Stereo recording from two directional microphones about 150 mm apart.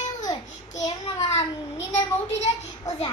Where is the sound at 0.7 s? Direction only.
25° left (ahead or behind).